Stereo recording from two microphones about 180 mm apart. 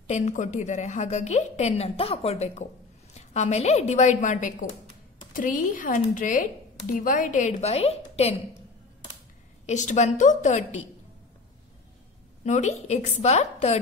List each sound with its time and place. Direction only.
0.0 s a woman's voice: 40° left (ahead or behind)
9.7 s a woman's voice: 40° left (ahead or behind)
12.4 s a woman's voice: 40° left (ahead or behind)